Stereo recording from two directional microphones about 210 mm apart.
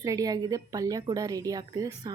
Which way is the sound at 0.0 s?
15° right (ahead or behind).